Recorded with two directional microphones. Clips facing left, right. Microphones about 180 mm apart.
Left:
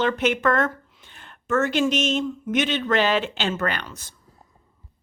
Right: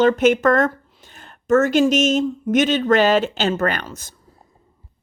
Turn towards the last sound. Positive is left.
turn(degrees=-45)  # may be behind; listen again after turning